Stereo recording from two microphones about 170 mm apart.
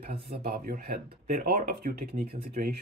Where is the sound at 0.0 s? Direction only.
70° right (ahead or behind).